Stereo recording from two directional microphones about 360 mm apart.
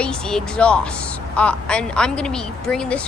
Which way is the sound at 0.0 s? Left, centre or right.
Centre.